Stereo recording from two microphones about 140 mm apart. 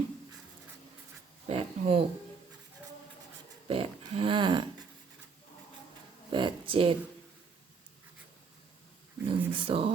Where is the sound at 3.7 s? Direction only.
40° right (ahead or behind).